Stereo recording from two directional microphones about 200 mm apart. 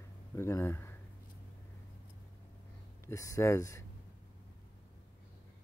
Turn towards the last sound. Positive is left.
turn(degrees=15)  # may be behind; listen again after turning